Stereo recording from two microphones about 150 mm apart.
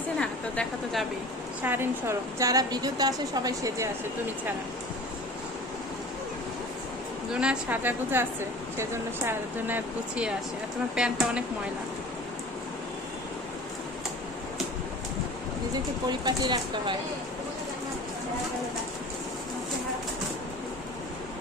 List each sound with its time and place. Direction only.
0.2 s a sound: 5° left (ahead or behind)
1.6 s a woman's voice: 15° right (ahead or behind)
7.3 s speech: 5° right (ahead or behind)
15.7 s a woman's voice: 30° right (ahead or behind)